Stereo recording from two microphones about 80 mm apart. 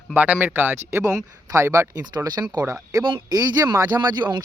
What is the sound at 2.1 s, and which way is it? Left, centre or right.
Speech, right.